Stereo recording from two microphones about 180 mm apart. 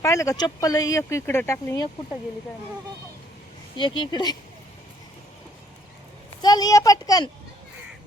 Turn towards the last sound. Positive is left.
turn(degrees=20)  # may be behind; listen again after turning